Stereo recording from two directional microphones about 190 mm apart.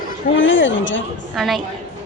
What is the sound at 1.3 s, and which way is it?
Speech, centre (ahead or behind).